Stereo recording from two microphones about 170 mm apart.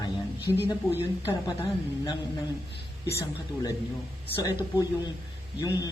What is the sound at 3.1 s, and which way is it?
Speech, 20° left (ahead or behind).